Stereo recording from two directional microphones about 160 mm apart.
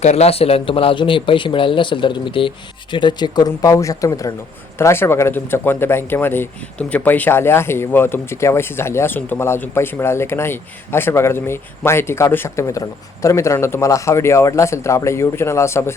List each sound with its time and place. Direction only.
0.0 s speech: 40° left (ahead or behind); by 16.0 s 15° left (ahead or behind)